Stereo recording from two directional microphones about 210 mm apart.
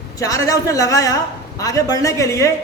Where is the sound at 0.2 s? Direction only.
15° left (ahead or behind).